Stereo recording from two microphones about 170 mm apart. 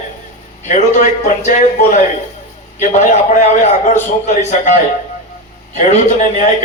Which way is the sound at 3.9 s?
45° left (ahead or behind).